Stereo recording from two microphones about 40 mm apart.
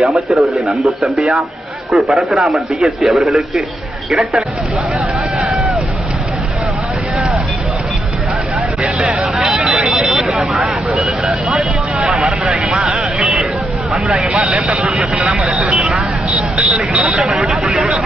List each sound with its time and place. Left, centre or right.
0.0 s a man's voice: centre
4.1 s speech: centre
8.9 s hubbub: centre
9.8 s a sound: centre
10.2 s vehicle: centre
12.2 s a sound: right
13.2 s vehicle: centre
13.9 s speech: right
15.1 s speech: right
15.9 s a sound: right
17.2 s speech: centre